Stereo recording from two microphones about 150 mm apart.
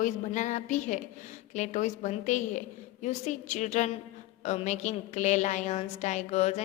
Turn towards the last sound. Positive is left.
turn(degrees=45)  # may be behind; listen again after turning